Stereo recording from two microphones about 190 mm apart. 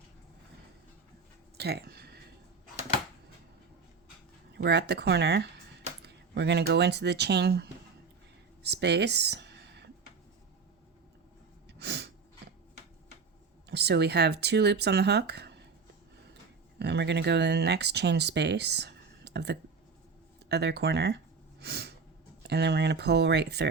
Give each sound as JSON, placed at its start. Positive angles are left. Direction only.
{"t": 1.5, "sound": "a sound", "side_deg": -60}
{"t": 4.5, "sound": "speech", "side_deg": -60}
{"t": 8.6, "sound": "a sound", "side_deg": -60}
{"t": 11.8, "sound": "sneeze", "side_deg": -60}
{"t": 13.7, "sound": "speech", "side_deg": -60}
{"t": 21.6, "sound": "snort", "side_deg": -60}
{"t": 22.4, "sound": "speech", "side_deg": -60}